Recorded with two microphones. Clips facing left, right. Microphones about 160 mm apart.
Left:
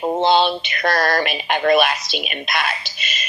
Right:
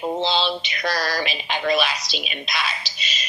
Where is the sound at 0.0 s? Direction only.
55° left (ahead or behind).